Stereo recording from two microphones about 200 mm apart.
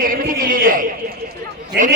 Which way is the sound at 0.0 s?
45° right (ahead or behind).